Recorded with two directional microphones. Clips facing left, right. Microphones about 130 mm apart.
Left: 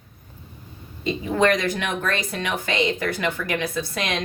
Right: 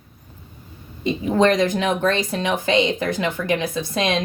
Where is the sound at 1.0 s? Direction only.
25° right (ahead or behind).